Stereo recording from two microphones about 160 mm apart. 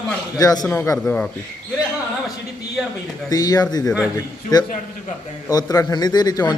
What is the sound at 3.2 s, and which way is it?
A man's voice, 25° left (ahead or behind).